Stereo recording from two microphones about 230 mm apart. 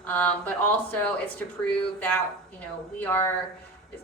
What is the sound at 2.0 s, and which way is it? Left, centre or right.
A woman's voice, centre.